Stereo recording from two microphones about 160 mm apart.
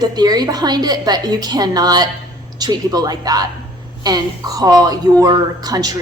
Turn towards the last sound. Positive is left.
turn(degrees=-25)  # may be behind; listen again after turning